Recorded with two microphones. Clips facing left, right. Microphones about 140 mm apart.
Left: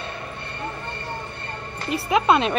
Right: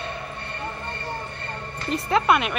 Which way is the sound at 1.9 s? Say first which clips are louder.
Left 1 dB; 15° left (ahead or behind).